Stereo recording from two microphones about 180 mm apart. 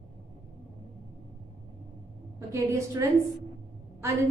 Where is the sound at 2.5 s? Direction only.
15° right (ahead or behind).